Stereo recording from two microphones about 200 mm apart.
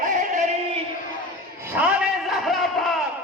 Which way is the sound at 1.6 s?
10° right (ahead or behind).